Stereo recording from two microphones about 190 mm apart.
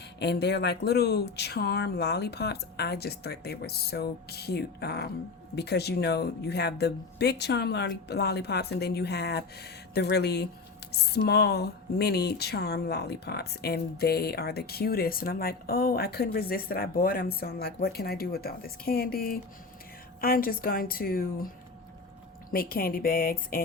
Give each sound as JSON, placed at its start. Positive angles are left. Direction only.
{"t": 0.2, "sound": "a woman's voice", "side_deg": 60}
{"t": 22.5, "sound": "a woman's voice", "side_deg": 50}